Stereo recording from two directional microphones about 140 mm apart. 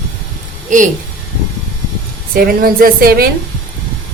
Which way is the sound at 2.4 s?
90° right.